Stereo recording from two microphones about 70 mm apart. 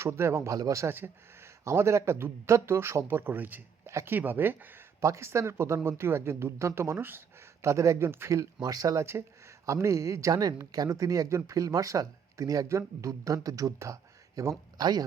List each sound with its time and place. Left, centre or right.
0.0 s speech: right
0.5 s speech: right
0.9 s speech: right
5.0 s speech: right
8.6 s speech: right
9.0 s speech: right
14.8 s speech: right